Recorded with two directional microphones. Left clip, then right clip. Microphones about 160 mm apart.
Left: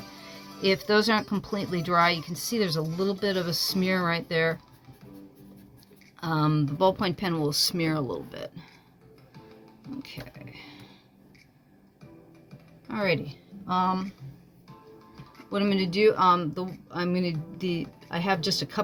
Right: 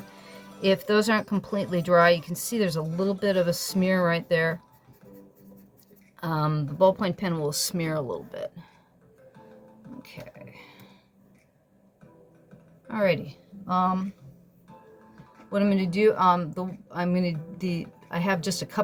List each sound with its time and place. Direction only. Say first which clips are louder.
0.6 s speech: right 1 dB; 25° right (ahead or behind)
6.1 s speech: left 2 dB; 25° right (ahead or behind); by 8.6 s 10° right (ahead or behind)
10.0 s speech: right 2 dB; 10° right (ahead or behind)
12.9 s a woman's voice: right 3 dB; 15° right (ahead or behind)
13.2 s a sound: even; 20° right (ahead or behind)
15.4 s speech: right 1 dB; 5° right (ahead or behind)